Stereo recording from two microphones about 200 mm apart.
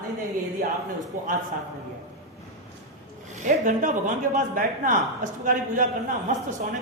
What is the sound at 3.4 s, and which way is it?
A man's voice, 40° right (ahead or behind).